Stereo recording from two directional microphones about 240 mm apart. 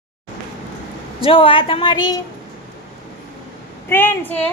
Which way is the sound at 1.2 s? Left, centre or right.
Left.